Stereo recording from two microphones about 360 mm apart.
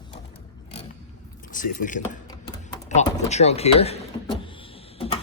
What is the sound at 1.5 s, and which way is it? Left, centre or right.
Speech, left.